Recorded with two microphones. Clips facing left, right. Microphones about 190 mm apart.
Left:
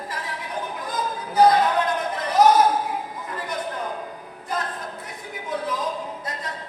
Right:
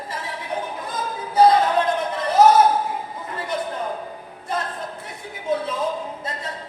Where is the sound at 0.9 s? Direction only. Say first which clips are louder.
Right 1 dB; 30° right (ahead or behind).